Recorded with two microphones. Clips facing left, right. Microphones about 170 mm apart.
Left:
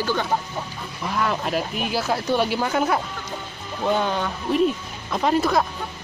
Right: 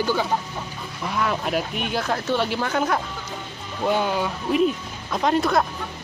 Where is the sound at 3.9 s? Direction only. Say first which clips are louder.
Even; 5° right (ahead or behind).